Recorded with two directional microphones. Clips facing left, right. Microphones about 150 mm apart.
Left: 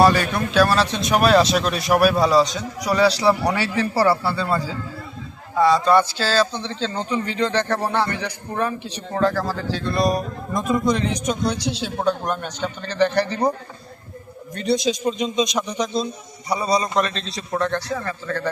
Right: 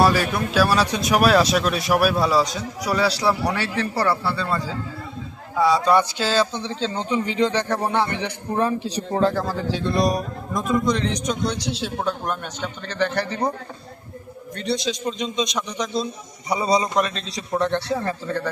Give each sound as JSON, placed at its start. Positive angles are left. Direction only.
{"t": 0.0, "sound": "speech", "side_deg": -5}
{"t": 5.5, "sound": "speech", "side_deg": -10}
{"t": 6.6, "sound": "speech", "side_deg": -5}
{"t": 7.0, "sound": "a man's voice", "side_deg": -20}
{"t": 10.5, "sound": "speech", "side_deg": 5}
{"t": 14.8, "sound": "speech", "side_deg": 10}
{"t": 16.5, "sound": "a man's voice", "side_deg": -20}
{"t": 16.9, "sound": "a man's voice", "side_deg": -5}